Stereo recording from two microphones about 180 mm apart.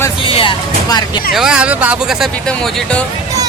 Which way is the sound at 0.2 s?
30° left (ahead or behind).